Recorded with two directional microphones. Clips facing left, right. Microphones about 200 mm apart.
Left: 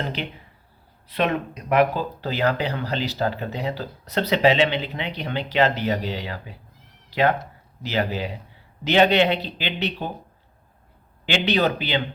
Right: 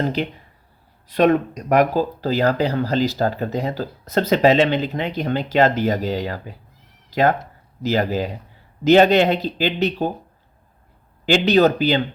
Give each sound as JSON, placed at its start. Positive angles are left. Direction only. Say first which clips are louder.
{"t": 0.0, "sound": "speech", "louder": "right 7 dB", "side_deg": -40}
{"t": 11.3, "sound": "speech", "louder": "right 6 dB", "side_deg": -40}